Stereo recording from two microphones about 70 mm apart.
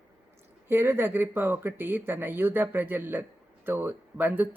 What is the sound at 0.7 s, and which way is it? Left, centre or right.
Speech, right.